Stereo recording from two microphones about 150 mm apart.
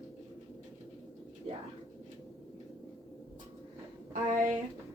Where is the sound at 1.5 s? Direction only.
40° right (ahead or behind).